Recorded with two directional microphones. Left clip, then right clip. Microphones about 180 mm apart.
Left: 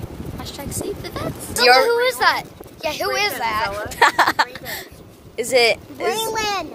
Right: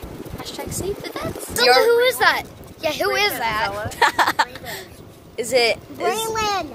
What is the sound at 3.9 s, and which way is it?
Speech, 35° left (ahead or behind).